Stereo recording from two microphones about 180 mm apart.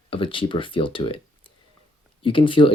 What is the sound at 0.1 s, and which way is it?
Speech, 30° left (ahead or behind).